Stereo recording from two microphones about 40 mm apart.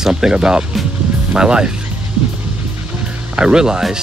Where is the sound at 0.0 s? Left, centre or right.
Centre.